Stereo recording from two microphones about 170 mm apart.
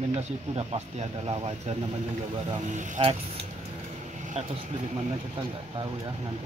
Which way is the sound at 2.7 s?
45° right (ahead or behind).